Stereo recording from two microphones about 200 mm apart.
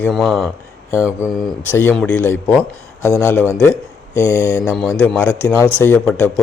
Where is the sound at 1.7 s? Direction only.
10° left (ahead or behind).